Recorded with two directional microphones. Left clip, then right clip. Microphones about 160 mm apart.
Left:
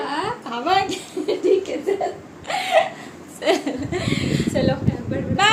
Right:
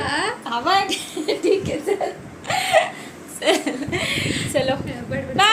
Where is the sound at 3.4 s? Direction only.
Centre (ahead or behind).